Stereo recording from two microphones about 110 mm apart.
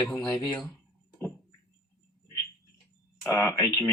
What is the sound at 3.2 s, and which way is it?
Speech, 20° left (ahead or behind).